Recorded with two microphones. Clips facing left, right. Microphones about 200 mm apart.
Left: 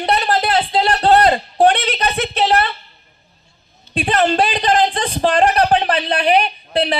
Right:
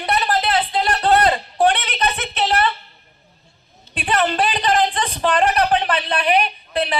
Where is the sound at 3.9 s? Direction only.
30° left (ahead or behind).